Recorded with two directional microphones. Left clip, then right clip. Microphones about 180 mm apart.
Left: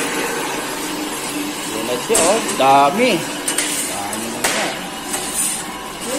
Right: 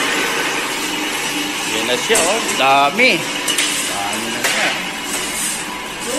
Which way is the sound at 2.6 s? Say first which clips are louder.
Even; 20° left (ahead or behind).